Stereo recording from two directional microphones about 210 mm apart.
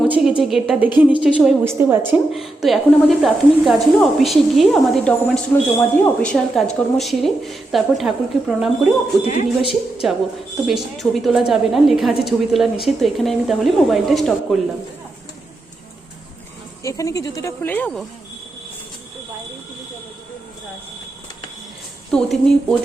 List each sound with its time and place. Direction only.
0.1 s a woman's voice: 5° right (ahead or behind)
9.2 s speech: 30° left (ahead or behind)
10.0 s a woman's voice: centre (ahead or behind)
16.8 s speech: 15° left (ahead or behind)
22.1 s a woman's voice: 5° left (ahead or behind)